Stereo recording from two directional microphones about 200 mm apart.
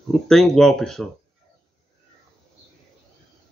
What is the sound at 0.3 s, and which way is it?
Speech, centre (ahead or behind).